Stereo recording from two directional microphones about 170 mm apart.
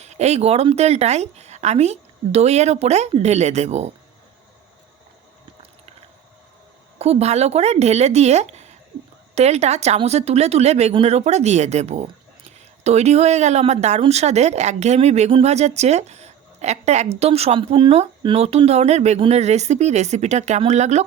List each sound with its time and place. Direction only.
0.0 s a woman's voice: 40° right (ahead or behind)
7.0 s a woman's voice: 40° right (ahead or behind)